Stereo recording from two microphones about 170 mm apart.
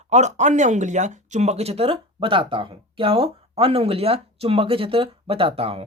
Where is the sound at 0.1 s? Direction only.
45° right (ahead or behind).